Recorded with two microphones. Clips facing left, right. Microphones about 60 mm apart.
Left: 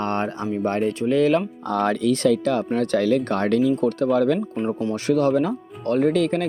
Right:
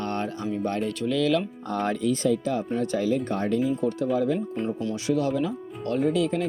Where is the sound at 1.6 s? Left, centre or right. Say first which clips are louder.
Left 5 dB; left.